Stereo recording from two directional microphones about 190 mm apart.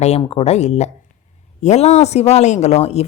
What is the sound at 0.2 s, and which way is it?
Speech, 30° left (ahead or behind).